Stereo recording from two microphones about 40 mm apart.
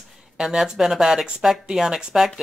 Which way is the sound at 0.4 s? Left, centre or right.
Centre.